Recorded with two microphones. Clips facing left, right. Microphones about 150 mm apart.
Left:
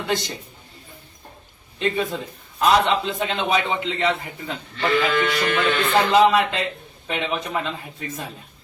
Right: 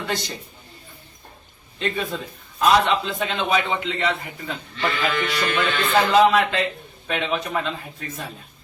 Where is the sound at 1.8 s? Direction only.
20° left (ahead or behind).